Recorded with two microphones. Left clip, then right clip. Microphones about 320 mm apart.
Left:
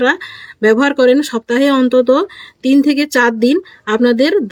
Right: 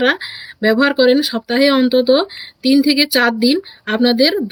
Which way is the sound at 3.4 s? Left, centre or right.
Right.